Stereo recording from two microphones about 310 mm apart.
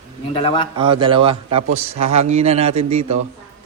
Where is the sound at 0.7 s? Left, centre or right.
Centre.